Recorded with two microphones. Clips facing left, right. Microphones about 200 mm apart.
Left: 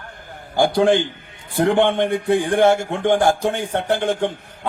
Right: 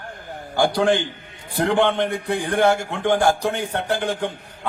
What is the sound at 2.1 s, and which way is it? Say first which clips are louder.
Speech: left 5 dB; 25° left (ahead or behind).